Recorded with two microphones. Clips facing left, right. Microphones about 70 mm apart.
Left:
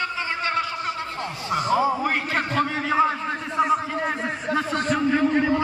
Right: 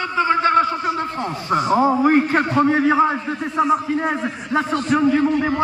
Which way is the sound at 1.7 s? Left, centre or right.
Right.